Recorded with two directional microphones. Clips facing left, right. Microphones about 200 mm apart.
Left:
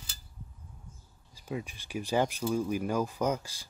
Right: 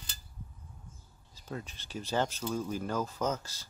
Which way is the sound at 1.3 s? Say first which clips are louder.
Left 4 dB; 10° left (ahead or behind).